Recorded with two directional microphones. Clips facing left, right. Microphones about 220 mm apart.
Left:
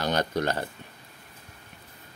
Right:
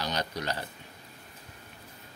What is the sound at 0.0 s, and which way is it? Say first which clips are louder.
Speech: left 7 dB; 50° left (ahead or behind).